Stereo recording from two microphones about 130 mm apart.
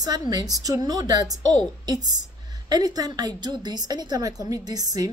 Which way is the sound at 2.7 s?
30° right (ahead or behind).